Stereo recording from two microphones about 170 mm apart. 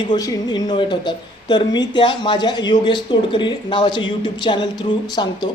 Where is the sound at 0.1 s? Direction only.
25° left (ahead or behind).